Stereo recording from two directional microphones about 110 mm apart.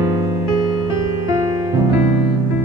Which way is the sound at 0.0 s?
30° right (ahead or behind).